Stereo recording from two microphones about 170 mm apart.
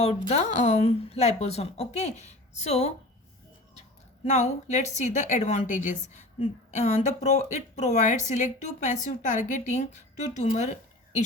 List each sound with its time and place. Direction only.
0.0 s a woman's voice: 35° left (ahead or behind)